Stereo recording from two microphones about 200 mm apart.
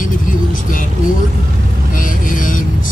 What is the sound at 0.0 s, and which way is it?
Vehicle, 40° left (ahead or behind).